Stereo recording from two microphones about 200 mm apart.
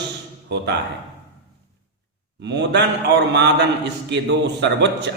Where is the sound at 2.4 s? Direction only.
60° right (ahead or behind).